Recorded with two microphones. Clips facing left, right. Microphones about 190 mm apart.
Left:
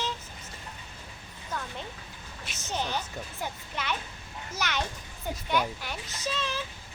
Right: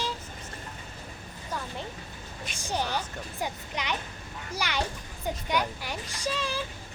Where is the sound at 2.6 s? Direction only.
10° right (ahead or behind).